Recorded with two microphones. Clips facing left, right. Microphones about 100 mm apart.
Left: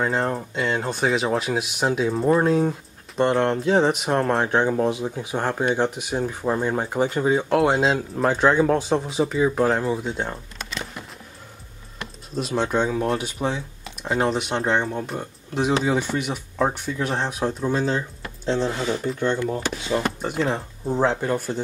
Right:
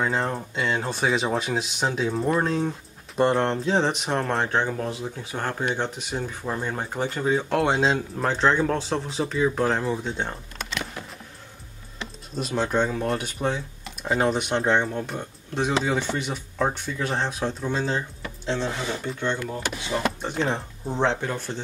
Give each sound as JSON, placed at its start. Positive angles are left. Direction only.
{"t": 0.0, "sound": "speech", "side_deg": 0}
{"t": 4.5, "sound": "speech", "side_deg": 15}
{"t": 6.2, "sound": "speech", "side_deg": 25}
{"t": 6.6, "sound": "speech", "side_deg": 10}
{"t": 12.4, "sound": "speech", "side_deg": 0}
{"t": 19.0, "sound": "speech", "side_deg": 10}